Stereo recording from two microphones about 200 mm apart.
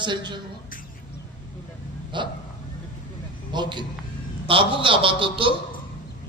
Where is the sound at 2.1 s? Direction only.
25° right (ahead or behind).